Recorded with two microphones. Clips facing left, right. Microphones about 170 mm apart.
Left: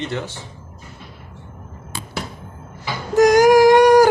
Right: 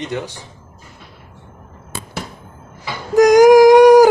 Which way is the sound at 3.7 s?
Centre (ahead or behind).